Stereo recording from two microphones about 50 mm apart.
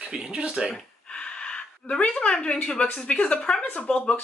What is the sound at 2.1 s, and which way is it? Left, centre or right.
A woman's voice, centre.